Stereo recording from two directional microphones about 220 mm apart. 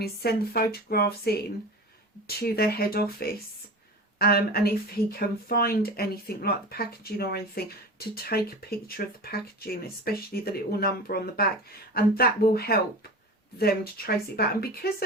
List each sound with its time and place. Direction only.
0.0 s speech: 45° left (ahead or behind)